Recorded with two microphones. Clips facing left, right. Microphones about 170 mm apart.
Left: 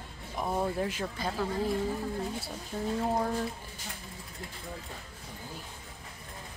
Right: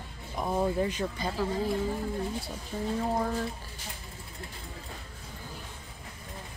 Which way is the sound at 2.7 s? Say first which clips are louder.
Right 1 dB; 5° right (ahead or behind).